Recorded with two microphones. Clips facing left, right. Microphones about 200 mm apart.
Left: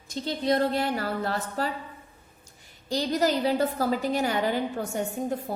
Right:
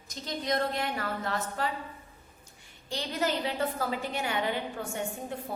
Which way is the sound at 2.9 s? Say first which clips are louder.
Left 6 dB; 40° left (ahead or behind).